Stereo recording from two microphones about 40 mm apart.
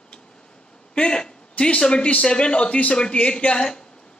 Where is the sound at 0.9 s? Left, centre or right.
Left.